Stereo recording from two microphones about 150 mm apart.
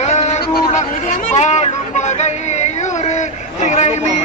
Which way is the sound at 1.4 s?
50° left (ahead or behind).